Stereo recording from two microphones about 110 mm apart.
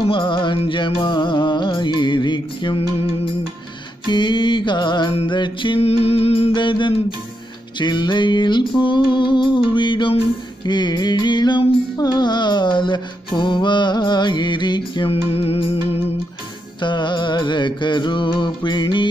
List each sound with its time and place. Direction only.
0.0 s music: 50° left (ahead or behind)
4.1 s mantra: 45° left (ahead or behind)
5.3 s music: 45° left (ahead or behind)
5.8 s music: 65° left (ahead or behind)
6.5 s music: 45° left (ahead or behind)
15.0 s music: 60° left (ahead or behind)
16.8 s music: 45° left (ahead or behind)